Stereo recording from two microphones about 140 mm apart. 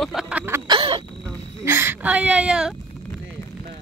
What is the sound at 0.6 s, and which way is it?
Speech, 35° right (ahead or behind).